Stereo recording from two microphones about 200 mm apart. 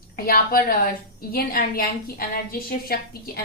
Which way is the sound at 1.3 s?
50° left (ahead or behind).